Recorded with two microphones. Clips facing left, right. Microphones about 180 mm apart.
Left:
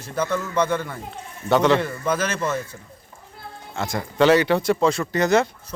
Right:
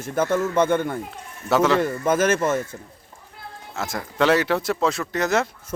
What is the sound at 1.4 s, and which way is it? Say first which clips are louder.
Speech: left 1 dB; centre (ahead or behind).